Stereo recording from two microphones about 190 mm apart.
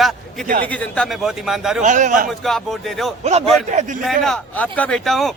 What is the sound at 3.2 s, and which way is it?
Speech, 35° right (ahead or behind).